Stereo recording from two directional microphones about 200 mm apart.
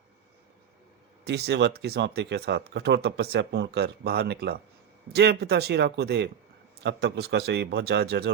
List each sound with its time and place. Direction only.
1.2 s a man's voice: 55° right (ahead or behind)